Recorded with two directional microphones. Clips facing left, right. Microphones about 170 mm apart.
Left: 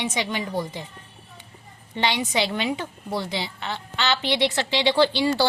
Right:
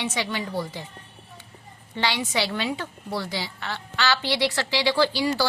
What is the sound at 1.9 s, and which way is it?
A woman's voice, 20° left (ahead or behind).